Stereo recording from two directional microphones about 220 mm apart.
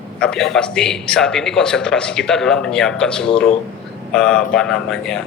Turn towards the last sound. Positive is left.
turn(degrees=0)  # may be behind; listen again after turning